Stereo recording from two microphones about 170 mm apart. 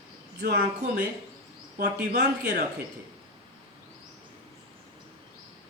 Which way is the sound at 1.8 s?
65° right (ahead or behind).